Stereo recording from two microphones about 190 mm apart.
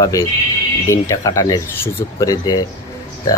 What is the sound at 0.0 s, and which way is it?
Speech, 20° left (ahead or behind).